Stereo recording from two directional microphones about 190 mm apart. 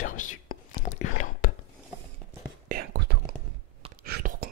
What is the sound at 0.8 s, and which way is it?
Whispering, 40° left (ahead or behind).